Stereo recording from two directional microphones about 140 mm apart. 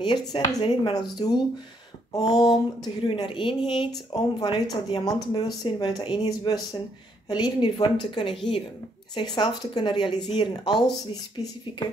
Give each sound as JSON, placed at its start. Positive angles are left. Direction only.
{"t": 0.0, "sound": "speech", "side_deg": 30}